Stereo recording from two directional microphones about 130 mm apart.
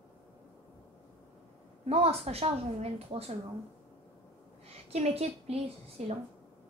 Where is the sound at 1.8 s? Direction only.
50° right (ahead or behind).